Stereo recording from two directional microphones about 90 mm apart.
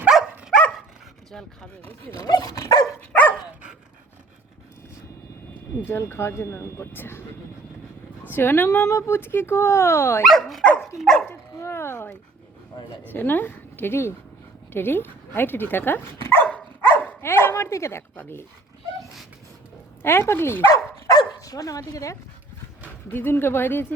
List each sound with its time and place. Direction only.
0.1 s dog: centre (ahead or behind)
1.3 s speech: 5° left (ahead or behind)
2.1 s speech: 45° left (ahead or behind)
3.1 s dog: 20° left (ahead or behind)
5.8 s speech: 25° left (ahead or behind)
8.3 s speech: 25° left (ahead or behind)
10.2 s speech: centre (ahead or behind)
11.3 s chopping: 30° left (ahead or behind)
13.1 s speech: 20° left (ahead or behind)
16.5 s dog: 15° left (ahead or behind); by 18.0 s 30° left (ahead or behind)
18.2 s speech: 25° left (ahead or behind)
20.0 s speech: 25° left (ahead or behind)
21.1 s dog: 45° left (ahead or behind)
23.1 s speech: 25° left (ahead or behind)